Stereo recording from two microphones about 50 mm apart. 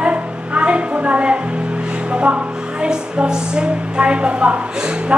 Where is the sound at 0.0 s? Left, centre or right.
Right.